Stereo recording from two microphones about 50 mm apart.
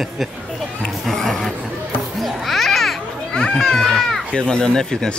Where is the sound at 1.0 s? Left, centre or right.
Centre.